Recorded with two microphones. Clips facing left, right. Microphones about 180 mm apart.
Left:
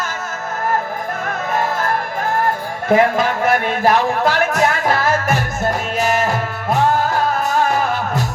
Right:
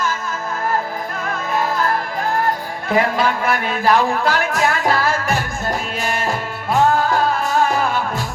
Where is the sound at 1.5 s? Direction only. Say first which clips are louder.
Even; 45° left (ahead or behind).